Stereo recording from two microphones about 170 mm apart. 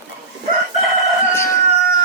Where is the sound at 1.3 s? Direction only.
15° left (ahead or behind).